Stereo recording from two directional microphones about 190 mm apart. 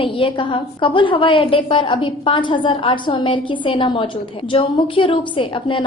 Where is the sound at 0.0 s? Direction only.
25° left (ahead or behind).